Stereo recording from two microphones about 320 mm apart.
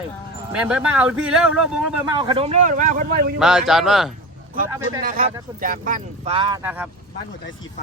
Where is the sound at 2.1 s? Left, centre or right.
Centre.